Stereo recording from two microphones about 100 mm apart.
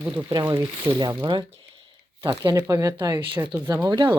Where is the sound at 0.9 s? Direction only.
50° right (ahead or behind).